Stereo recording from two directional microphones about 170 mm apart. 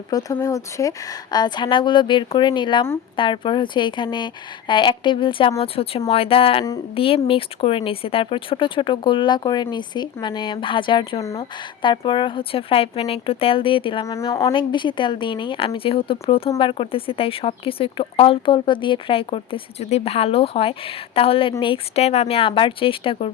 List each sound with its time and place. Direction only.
0.1 s speech: 20° left (ahead or behind)